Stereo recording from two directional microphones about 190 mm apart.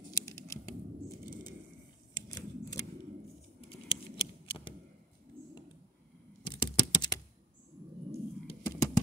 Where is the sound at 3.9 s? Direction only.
30° left (ahead or behind).